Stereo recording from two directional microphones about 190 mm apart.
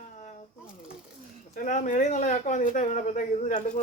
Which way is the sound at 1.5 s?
45° left (ahead or behind).